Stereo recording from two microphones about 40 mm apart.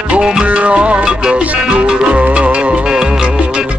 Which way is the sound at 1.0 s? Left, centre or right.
Right.